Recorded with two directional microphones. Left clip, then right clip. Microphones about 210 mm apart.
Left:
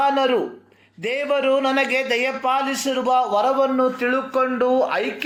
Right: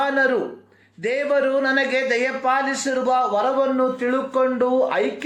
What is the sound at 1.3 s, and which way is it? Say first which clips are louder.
A man's voice: left 1 dB; 20° left (ahead or behind).